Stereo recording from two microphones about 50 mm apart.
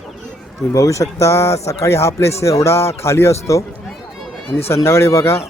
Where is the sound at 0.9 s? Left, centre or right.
Left.